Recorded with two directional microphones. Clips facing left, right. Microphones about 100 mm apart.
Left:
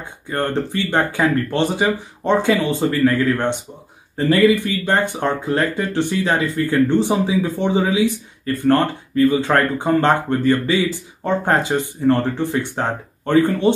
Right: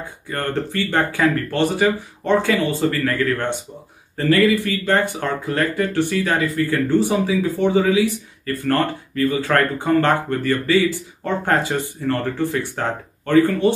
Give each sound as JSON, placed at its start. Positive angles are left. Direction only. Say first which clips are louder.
{"t": 0.0, "sound": "speech", "louder": "left 3 dB", "side_deg": 20}